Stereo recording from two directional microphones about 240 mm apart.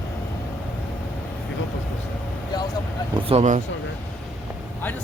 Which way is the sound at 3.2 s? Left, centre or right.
Right.